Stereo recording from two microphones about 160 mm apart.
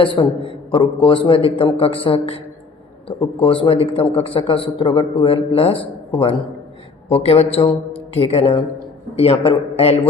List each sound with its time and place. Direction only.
0.0 s a man's voice: 30° left (ahead or behind)
7.1 s a man's voice: 40° left (ahead or behind)